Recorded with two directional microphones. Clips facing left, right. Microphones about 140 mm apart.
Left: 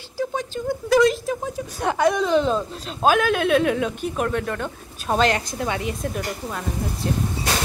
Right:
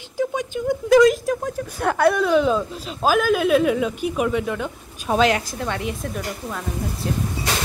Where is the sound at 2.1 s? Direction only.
5° right (ahead or behind).